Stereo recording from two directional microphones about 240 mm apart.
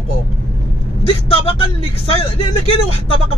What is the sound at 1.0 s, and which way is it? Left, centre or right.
Speech, left.